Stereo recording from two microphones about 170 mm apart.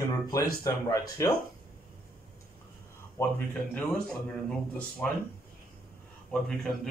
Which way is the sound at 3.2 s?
10° left (ahead or behind).